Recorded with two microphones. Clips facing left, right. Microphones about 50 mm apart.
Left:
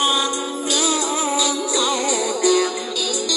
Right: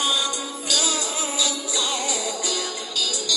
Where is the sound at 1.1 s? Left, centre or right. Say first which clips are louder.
Left 6 dB; left.